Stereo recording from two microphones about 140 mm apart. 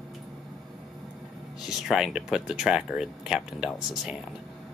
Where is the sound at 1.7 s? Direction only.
5° right (ahead or behind).